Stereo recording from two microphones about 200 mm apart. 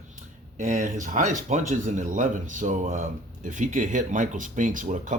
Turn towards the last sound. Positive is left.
turn(degrees=-40)  # may be behind; listen again after turning